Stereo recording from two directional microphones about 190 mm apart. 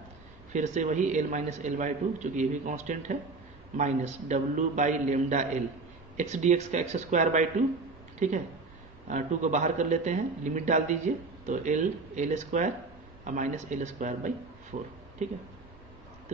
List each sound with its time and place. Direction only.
0.5 s a man's voice: 40° right (ahead or behind)
16.3 s speech: 40° right (ahead or behind)